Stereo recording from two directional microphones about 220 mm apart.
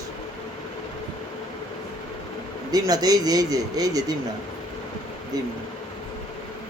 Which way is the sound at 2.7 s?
15° right (ahead or behind).